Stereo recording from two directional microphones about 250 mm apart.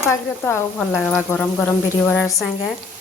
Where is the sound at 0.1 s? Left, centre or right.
Centre.